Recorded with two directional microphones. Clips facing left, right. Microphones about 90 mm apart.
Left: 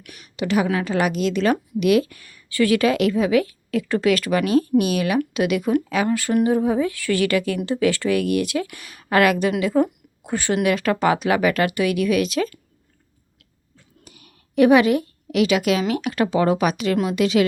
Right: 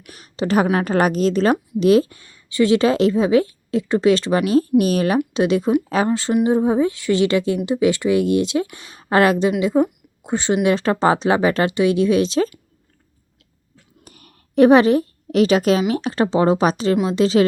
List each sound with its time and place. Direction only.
0.0 s a woman's voice: 35° right (ahead or behind)
14.0 s a sound: 45° right (ahead or behind)
15.9 s a woman's voice: 30° right (ahead or behind)